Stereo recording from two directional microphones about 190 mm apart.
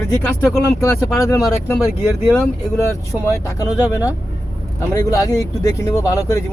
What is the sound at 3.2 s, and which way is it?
Speech, 20° left (ahead or behind).